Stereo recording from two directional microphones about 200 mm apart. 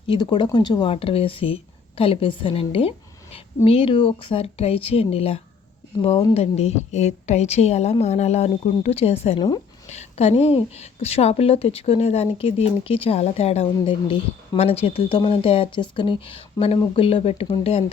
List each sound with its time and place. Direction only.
0.1 s a woman's voice: 20° left (ahead or behind)